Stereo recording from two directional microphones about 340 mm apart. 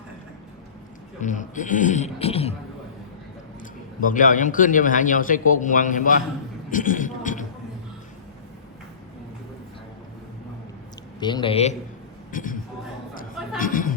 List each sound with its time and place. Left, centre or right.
1.2 s a man's voice: left
3.6 s a man's voice: left
11.2 s speech: centre
13.6 s chatter: left